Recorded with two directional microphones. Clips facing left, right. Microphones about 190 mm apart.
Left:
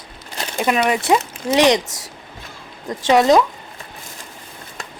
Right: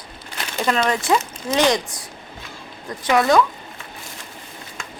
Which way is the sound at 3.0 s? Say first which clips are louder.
Left 4 dB; 20° left (ahead or behind).